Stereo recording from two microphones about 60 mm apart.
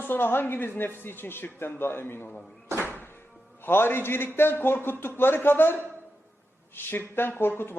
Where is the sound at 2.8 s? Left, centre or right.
Left.